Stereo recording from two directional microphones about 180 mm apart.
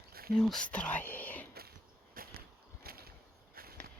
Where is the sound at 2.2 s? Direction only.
50° right (ahead or behind).